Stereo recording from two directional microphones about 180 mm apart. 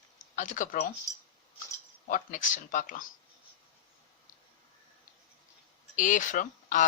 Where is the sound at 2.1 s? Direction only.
45° left (ahead or behind).